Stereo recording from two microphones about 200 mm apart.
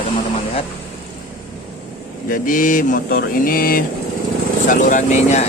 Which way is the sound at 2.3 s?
40° left (ahead or behind).